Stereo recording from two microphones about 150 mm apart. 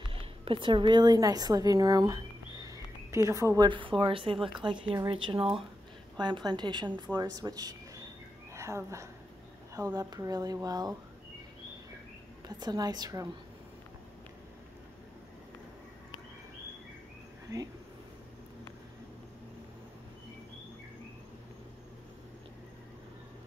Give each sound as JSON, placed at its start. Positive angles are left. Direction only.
{"t": 0.1, "sound": "a woman's voice", "side_deg": -35}
{"t": 12.4, "sound": "speech", "side_deg": -25}
{"t": 17.5, "sound": "speech", "side_deg": -25}